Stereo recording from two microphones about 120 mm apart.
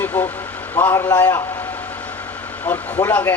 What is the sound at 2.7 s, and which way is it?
Speech, 10° left (ahead or behind).